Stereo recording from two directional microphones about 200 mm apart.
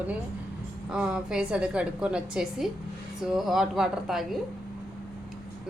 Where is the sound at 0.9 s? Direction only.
5° right (ahead or behind).